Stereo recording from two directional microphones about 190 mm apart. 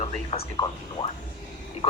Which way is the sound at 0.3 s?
35° left (ahead or behind).